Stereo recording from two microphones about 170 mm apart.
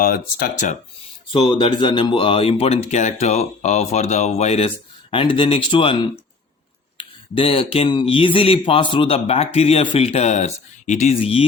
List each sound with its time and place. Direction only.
0.0 s speech: 60° left (ahead or behind)
1.3 s speech: 30° left (ahead or behind)